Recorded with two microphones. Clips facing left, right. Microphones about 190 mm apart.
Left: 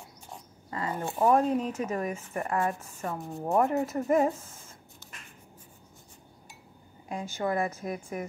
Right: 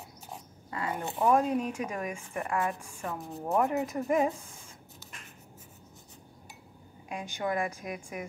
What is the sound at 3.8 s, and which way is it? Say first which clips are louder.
Speech: left 2 dB; 5° right (ahead or behind).